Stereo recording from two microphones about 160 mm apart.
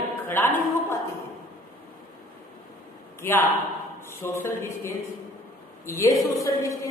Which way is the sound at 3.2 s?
15° left (ahead or behind).